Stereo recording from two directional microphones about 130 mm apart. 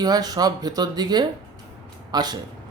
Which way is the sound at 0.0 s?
30° right (ahead or behind).